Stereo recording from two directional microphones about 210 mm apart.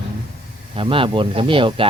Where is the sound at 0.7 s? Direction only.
25° right (ahead or behind).